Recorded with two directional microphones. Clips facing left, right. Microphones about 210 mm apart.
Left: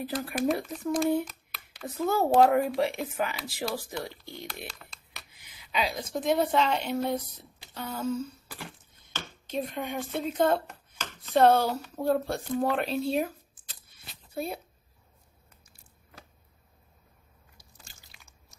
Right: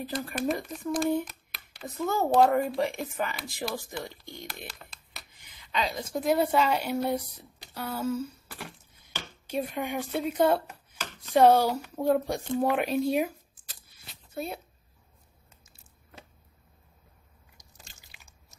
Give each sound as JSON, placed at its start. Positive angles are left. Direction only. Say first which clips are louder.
{"t": 0.0, "sound": "a woman's voice", "louder": "left 2 dB", "side_deg": 5}
{"t": 6.1, "sound": "speech", "louder": "right 1 dB", "side_deg": -5}
{"t": 14.3, "sound": "speech", "louder": "left 1 dB", "side_deg": 0}
{"t": 15.6, "sound": "a sound", "louder": "even", "side_deg": -25}